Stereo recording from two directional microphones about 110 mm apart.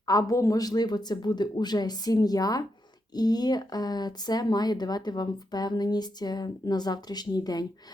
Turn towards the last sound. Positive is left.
turn(degrees=35)  # may be behind; listen again after turning